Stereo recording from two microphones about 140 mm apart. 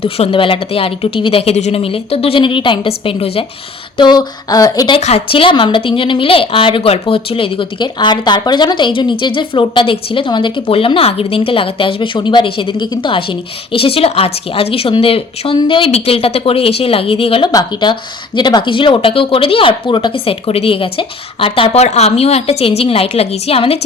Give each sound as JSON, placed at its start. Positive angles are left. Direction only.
{"t": 0.0, "sound": "speech", "side_deg": 40}
{"t": 3.9, "sound": "speech", "side_deg": 30}
{"t": 4.9, "sound": "speech", "side_deg": 50}
{"t": 17.5, "sound": "speech", "side_deg": 30}